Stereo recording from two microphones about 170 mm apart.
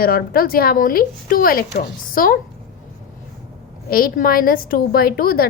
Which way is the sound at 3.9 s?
60° left (ahead or behind).